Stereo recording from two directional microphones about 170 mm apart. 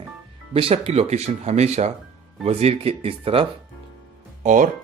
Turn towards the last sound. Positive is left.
turn(degrees=-45)  # may be behind; listen again after turning